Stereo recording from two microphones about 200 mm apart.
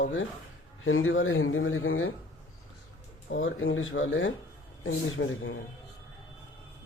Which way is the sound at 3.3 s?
75° left (ahead or behind).